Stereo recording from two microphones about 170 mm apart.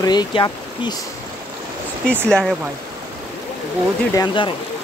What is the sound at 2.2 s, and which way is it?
Speech, 5° left (ahead or behind).